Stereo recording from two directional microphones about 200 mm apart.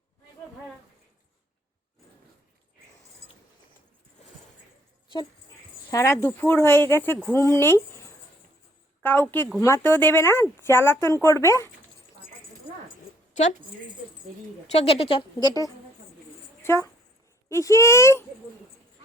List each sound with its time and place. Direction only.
5.9 s speech: 15° left (ahead or behind)
14.7 s a woman's voice: 30° left (ahead or behind); by 18.3 s 15° left (ahead or behind)